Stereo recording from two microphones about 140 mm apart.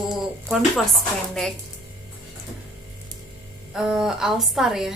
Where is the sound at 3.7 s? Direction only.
5° right (ahead or behind).